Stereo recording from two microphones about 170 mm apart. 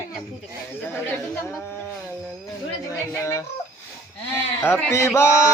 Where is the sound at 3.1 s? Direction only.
15° left (ahead or behind).